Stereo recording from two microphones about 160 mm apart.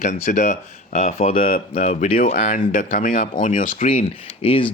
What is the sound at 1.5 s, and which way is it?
Speech, 55° left (ahead or behind).